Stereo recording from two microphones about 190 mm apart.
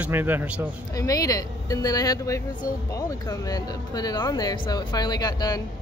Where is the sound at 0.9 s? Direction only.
20° left (ahead or behind).